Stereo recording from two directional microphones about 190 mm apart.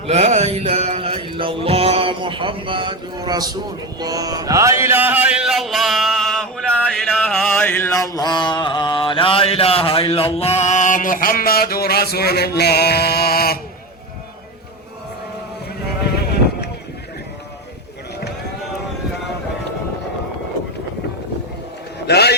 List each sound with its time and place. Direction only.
0.1 s mantra: 35° right (ahead or behind); by 13.6 s 55° left (ahead or behind)
16.2 s vehicle: 55° left (ahead or behind)
22.0 s a sound: 60° left (ahead or behind)